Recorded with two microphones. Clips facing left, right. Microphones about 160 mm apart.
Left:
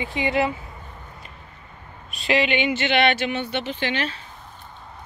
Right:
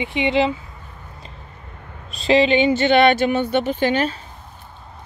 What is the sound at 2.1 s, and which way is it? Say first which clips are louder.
Speech: right 6 dB; 30° right (ahead or behind).